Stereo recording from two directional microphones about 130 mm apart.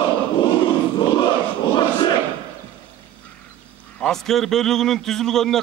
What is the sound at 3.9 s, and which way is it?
A man's voice, 5° left (ahead or behind).